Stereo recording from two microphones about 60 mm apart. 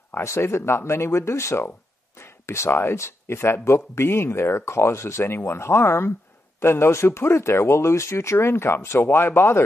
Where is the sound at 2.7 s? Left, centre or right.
Left.